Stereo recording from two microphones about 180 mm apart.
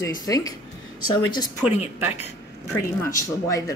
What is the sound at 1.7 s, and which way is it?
Speech, 35° left (ahead or behind).